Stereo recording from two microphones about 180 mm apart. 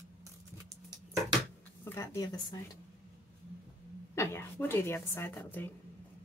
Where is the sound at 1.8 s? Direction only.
15° left (ahead or behind).